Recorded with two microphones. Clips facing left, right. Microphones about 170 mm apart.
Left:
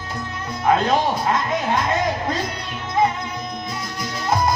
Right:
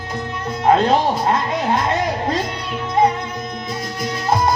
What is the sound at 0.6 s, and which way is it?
Speech, 35° right (ahead or behind).